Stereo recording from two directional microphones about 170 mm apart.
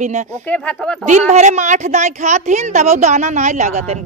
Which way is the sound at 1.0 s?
45° right (ahead or behind).